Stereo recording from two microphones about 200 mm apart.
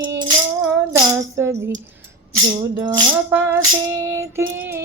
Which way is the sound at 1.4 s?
15° right (ahead or behind).